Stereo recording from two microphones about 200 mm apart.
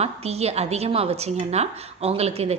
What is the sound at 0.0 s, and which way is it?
A woman's voice, 30° right (ahead or behind).